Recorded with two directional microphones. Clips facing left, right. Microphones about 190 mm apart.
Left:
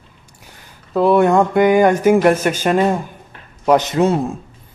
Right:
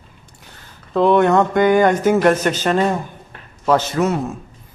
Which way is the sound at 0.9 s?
5° left (ahead or behind).